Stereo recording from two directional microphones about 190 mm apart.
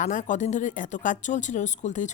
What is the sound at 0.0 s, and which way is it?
A woman's voice, 40° left (ahead or behind).